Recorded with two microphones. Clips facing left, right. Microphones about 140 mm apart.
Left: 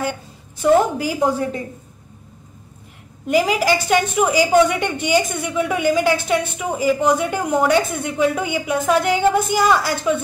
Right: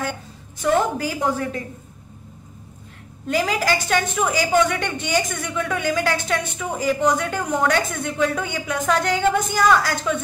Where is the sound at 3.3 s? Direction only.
15° left (ahead or behind).